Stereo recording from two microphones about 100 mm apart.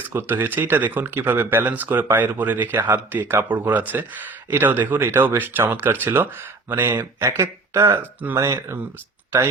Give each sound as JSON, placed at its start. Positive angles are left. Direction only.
{"t": 0.1, "sound": "speech", "side_deg": -20}